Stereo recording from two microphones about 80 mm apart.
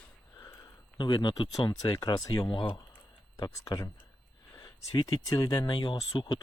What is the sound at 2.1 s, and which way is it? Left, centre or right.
Speech, left.